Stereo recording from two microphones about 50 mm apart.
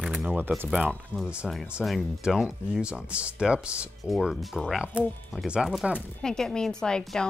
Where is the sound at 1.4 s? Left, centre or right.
Centre.